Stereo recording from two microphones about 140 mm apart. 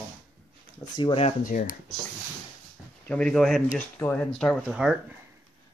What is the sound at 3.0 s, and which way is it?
Speech, 5° left (ahead or behind).